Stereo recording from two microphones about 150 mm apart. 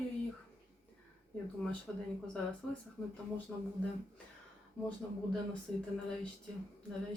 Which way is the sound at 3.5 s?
Centre (ahead or behind).